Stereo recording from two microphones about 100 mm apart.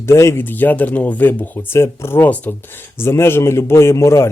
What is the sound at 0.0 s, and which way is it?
Speech, 30° left (ahead or behind).